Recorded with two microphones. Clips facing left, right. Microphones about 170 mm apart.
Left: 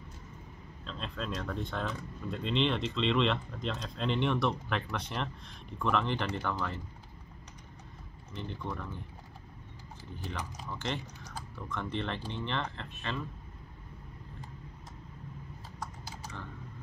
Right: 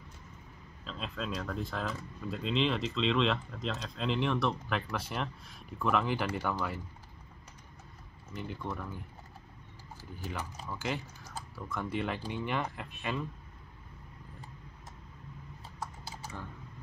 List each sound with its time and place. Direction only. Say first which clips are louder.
0.8 s speech: even; 5° right (ahead or behind)
8.3 s speech: even; 5° right (ahead or behind)
10.2 s speech: right 1 dB; 5° right (ahead or behind)
15.8 s typing: right 1 dB; 10° right (ahead or behind)